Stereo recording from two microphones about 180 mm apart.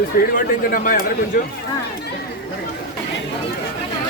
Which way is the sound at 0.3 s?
50° left (ahead or behind).